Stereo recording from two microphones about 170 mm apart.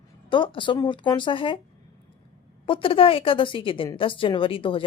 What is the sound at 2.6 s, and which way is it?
Speech, 30° left (ahead or behind).